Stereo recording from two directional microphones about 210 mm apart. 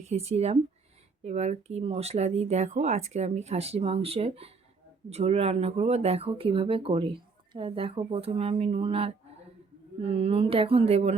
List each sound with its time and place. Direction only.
0.0 s speech: 30° right (ahead or behind)